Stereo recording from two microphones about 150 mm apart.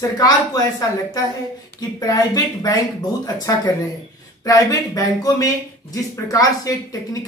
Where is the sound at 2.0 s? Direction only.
25° left (ahead or behind).